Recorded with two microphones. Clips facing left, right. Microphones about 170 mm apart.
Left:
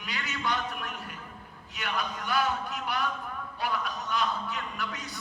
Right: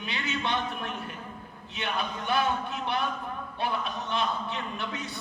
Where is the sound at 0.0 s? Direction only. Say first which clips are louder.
Right 2 dB; 25° right (ahead or behind).